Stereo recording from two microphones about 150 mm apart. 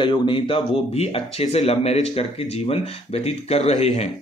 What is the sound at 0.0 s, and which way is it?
Speech, 35° left (ahead or behind).